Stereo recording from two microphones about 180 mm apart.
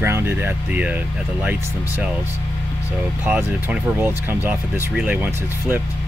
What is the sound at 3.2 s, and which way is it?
Speech, 10° right (ahead or behind).